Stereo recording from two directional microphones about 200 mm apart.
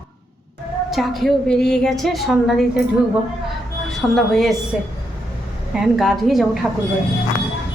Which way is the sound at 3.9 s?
Centre (ahead or behind).